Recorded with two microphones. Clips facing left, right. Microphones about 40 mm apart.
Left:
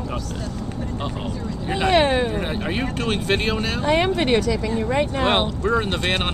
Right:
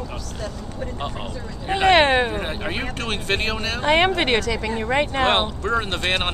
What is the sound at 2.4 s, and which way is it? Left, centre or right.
Speech, centre.